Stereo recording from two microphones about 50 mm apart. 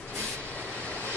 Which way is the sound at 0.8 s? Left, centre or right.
Left.